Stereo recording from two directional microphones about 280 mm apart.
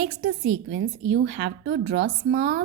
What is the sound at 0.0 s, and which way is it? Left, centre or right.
A woman's voice, right.